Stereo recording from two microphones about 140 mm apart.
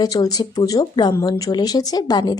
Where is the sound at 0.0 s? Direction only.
25° left (ahead or behind).